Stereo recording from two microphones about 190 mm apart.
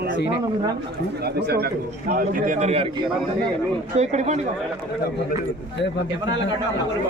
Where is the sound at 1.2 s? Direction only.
55° right (ahead or behind).